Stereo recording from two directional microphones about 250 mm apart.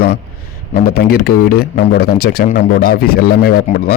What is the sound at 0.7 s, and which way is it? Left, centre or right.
Speech, left.